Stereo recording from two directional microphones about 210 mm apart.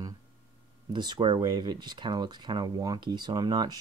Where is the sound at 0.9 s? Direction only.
20° right (ahead or behind).